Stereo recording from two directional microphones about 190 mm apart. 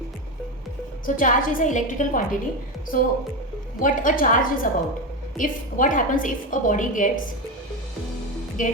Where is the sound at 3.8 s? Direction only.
45° left (ahead or behind).